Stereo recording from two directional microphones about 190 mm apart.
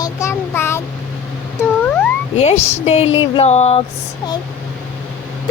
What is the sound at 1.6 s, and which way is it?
Cat, 10° left (ahead or behind).